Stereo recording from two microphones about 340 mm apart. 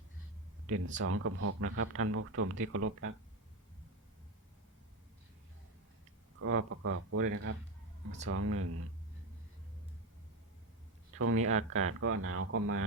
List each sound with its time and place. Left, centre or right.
0.9 s speech: right
6.4 s speech: right
11.1 s speech: right
11.5 s speech: centre
11.9 s speech: right